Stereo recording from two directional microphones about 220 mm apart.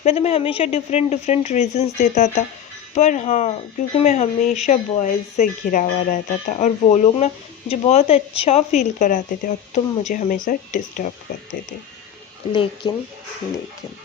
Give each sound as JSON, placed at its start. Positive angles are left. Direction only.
{"t": 0.0, "sound": "speech", "side_deg": 30}
{"t": 12.5, "sound": "speech", "side_deg": 20}